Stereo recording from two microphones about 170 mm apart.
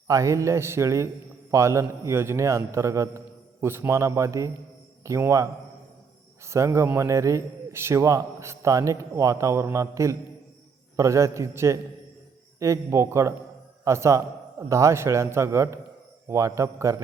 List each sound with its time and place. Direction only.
0.1 s a man's voice: 20° right (ahead or behind)